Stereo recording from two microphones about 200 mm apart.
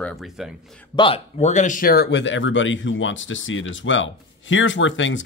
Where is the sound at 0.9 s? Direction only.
25° left (ahead or behind).